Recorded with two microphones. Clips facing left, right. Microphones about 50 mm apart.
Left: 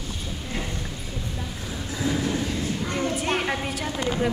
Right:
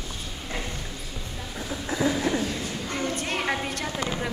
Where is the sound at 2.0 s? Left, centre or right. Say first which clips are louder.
Right 1 dB; right.